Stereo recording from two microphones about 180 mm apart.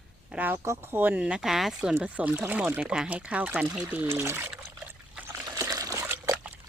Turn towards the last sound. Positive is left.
turn(degrees=-10)  # may be behind; listen again after turning